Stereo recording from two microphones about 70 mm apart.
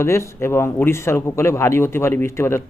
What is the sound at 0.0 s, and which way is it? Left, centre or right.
Speech, left.